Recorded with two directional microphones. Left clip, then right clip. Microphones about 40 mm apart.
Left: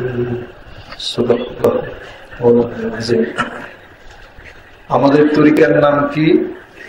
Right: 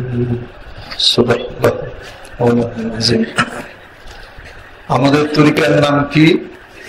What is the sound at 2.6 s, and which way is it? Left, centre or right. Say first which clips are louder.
Chant: left 1 dB; right.